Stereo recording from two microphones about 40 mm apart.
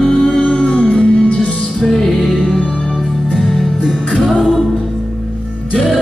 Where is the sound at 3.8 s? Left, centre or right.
Centre.